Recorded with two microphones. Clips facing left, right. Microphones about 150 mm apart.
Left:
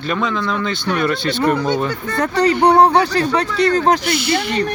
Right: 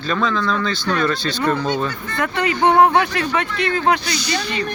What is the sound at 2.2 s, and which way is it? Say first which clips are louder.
Speech: left 4 dB; 35° left (ahead or behind).